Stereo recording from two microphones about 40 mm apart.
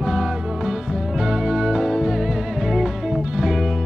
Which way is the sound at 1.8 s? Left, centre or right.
Centre.